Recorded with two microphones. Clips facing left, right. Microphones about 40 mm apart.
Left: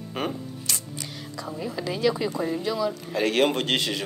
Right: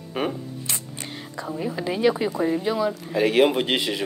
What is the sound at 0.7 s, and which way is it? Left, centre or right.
Music, right.